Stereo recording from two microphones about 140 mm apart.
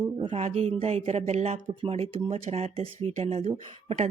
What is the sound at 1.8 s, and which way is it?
Speech, 45° right (ahead or behind).